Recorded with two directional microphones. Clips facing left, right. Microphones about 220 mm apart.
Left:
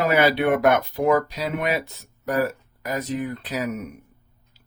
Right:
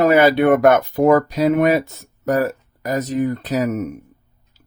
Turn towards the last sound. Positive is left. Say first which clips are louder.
# right 8 dB
turn(degrees=-45)  # may be behind; listen again after turning